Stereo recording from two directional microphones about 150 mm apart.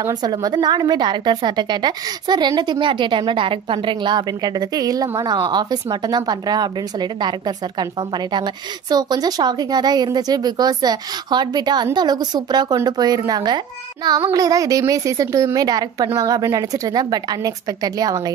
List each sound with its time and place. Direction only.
0.0 s a woman's voice: 25° right (ahead or behind)
8.9 s a woman's voice: 25° right (ahead or behind)